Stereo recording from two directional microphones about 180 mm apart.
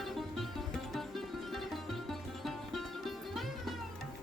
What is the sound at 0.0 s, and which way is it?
Music, centre (ahead or behind).